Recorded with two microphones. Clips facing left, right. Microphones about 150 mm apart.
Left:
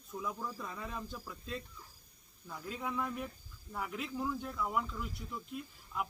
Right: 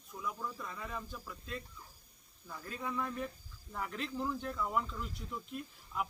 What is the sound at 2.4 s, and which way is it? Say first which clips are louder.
Speech: left 1 dB; 15° left (ahead or behind).